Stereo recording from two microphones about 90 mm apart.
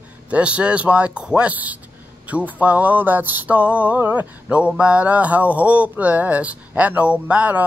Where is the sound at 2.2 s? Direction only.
15° right (ahead or behind).